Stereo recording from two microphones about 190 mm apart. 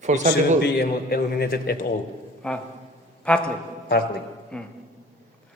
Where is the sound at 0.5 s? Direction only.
55° left (ahead or behind).